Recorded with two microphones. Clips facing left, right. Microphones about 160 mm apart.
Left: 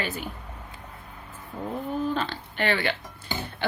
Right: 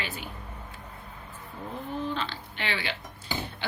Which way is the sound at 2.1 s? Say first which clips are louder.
Left 4 dB; 45° left (ahead or behind).